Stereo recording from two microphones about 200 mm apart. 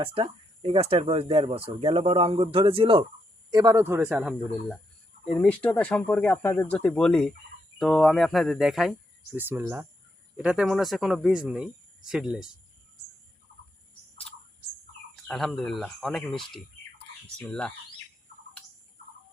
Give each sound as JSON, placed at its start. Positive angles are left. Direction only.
{"t": 0.0, "sound": "a man's voice", "side_deg": -25}
{"t": 5.2, "sound": "speech", "side_deg": 5}
{"t": 15.1, "sound": "speech", "side_deg": 0}